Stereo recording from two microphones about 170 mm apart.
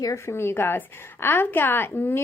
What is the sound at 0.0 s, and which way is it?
A woman's voice, 20° left (ahead or behind).